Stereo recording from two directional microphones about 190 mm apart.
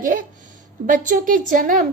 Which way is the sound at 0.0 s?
45° right (ahead or behind).